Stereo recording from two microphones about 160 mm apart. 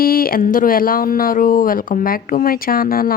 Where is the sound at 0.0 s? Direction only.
65° left (ahead or behind).